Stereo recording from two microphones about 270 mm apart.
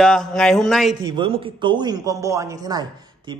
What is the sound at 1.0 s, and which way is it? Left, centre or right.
A man's voice, centre.